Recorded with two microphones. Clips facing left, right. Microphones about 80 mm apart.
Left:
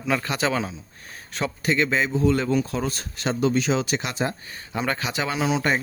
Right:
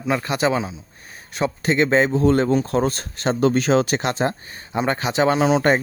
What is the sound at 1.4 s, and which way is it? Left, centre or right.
Speech, right.